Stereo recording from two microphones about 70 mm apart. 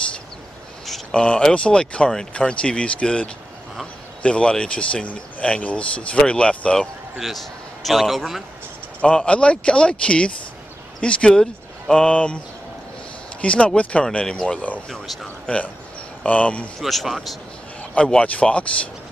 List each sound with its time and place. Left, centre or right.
1.1 s speech: centre
7.8 s a man's voice: centre
9.0 s speech: centre
13.4 s speech: centre
16.8 s a man's voice: centre
17.9 s speech: centre